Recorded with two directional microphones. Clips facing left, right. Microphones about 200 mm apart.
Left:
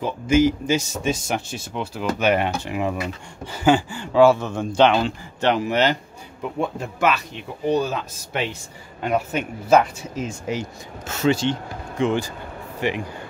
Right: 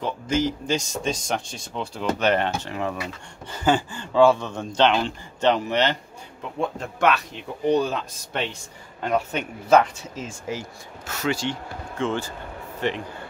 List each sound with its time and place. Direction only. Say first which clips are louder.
0.0 s speech: left 6 dB; 10° left (ahead or behind)